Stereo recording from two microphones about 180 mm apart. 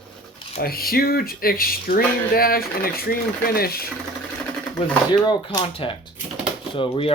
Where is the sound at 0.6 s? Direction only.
55° left (ahead or behind).